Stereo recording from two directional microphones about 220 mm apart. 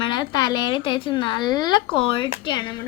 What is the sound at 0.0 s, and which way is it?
Speech, 20° left (ahead or behind).